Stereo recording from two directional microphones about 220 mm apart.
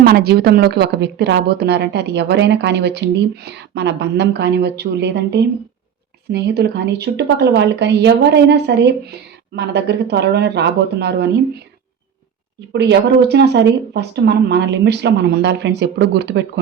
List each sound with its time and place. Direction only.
0.0 s speech: 45° right (ahead or behind)
12.7 s speech: 50° right (ahead or behind)